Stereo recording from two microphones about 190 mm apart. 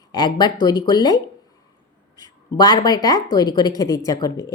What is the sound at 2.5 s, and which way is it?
A woman's voice, 20° left (ahead or behind).